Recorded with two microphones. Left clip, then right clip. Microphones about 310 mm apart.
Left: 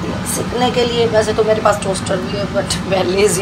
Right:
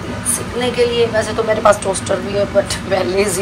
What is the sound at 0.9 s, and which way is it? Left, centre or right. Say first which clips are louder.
Speech: left 2 dB; centre.